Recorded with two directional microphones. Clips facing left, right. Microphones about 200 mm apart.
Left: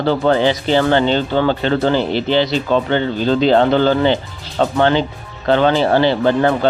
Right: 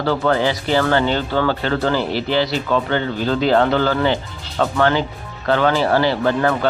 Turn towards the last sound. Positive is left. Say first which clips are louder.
# left 3 dB
turn(degrees=25)  # may be behind; listen again after turning